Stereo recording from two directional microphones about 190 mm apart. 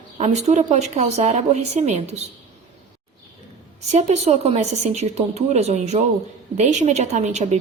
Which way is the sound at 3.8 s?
35° right (ahead or behind).